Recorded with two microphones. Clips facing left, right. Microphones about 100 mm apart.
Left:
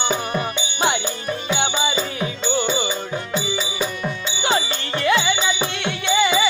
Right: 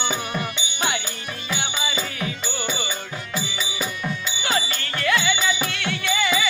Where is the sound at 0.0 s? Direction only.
40° left (ahead or behind).